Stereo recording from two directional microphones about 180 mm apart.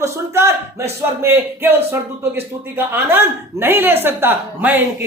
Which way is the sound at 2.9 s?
10° right (ahead or behind).